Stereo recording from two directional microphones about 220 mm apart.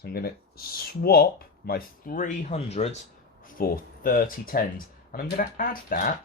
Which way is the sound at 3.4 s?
40° left (ahead or behind).